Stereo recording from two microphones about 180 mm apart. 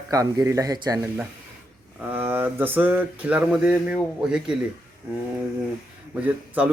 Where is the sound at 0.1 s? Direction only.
20° right (ahead or behind).